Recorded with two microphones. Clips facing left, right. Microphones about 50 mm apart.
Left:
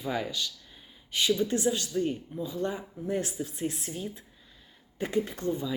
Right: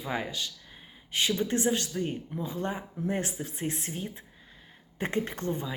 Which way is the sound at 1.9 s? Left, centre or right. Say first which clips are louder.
Left 3 dB; right.